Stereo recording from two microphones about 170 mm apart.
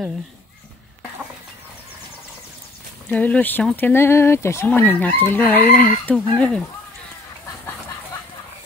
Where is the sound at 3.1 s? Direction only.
10° left (ahead or behind).